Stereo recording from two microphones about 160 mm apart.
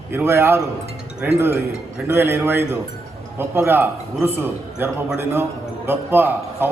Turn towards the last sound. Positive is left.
turn(degrees=-15)  # may be behind; listen again after turning